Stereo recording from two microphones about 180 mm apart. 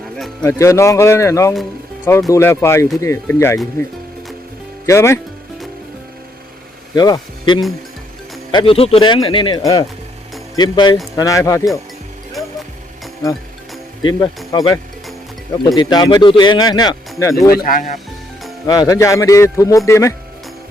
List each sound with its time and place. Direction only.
0.4 s speech: 15° left (ahead or behind)
4.9 s speech: 15° left (ahead or behind)
6.9 s speech: 25° left (ahead or behind)
14.0 s speech: 25° left (ahead or behind)
17.5 s speech: 50° left (ahead or behind)
18.6 s speech: 20° left (ahead or behind)